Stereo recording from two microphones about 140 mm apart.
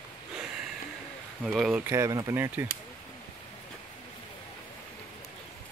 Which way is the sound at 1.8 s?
20° right (ahead or behind).